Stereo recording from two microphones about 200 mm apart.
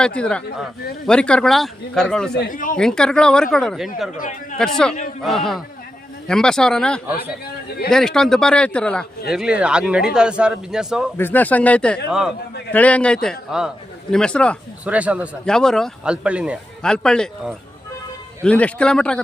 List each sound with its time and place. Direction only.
0.0 s a man's voice: 5° left (ahead or behind)
2.4 s speech: 45° left (ahead or behind)
2.7 s a man's voice: 5° left (ahead or behind)
11.2 s a man's voice: 10° left (ahead or behind)
14.8 s a man's voice: 5° right (ahead or behind)